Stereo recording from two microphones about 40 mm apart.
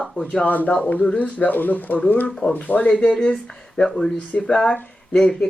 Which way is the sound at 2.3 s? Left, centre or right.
Centre.